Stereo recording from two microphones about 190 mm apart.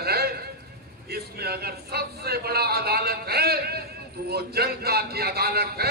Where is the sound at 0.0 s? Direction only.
55° right (ahead or behind).